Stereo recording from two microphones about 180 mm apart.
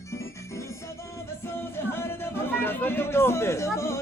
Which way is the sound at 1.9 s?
15° left (ahead or behind).